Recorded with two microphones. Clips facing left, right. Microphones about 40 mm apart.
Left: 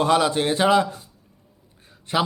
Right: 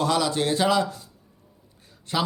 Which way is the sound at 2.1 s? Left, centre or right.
Left.